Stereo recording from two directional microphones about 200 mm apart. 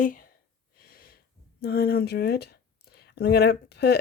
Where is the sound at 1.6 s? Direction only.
50° left (ahead or behind).